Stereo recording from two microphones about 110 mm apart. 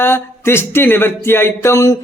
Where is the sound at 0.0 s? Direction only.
20° left (ahead or behind).